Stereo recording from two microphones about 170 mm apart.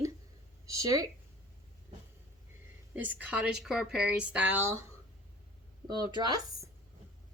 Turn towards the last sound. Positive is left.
turn(degrees=-25)  # may be behind; listen again after turning